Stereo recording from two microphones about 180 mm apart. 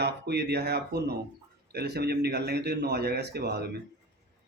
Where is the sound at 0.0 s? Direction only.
65° right (ahead or behind).